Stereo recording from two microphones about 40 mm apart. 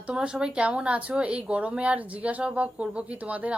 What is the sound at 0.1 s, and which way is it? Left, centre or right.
A woman's voice, right.